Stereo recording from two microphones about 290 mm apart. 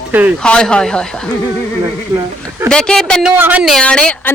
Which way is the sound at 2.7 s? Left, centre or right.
Centre.